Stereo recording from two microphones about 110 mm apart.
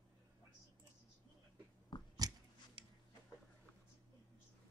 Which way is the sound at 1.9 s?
40° left (ahead or behind).